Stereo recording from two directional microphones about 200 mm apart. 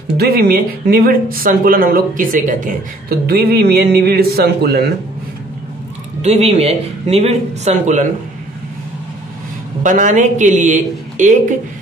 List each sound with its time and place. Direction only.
0.2 s speech: 50° right (ahead or behind)
6.2 s speech: 30° right (ahead or behind)
9.8 s speech: 40° right (ahead or behind)